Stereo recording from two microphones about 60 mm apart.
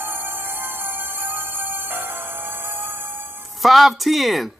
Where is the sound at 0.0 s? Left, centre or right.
Right.